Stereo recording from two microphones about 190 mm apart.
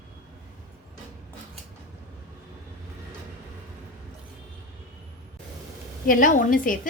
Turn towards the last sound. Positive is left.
turn(degrees=45)  # may be behind; listen again after turning